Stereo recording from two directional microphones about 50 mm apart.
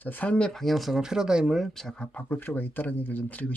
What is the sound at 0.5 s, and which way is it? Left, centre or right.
Speech, centre.